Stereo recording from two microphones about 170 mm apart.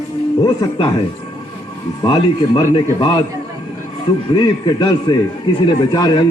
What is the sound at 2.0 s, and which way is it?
Speech, 30° left (ahead or behind).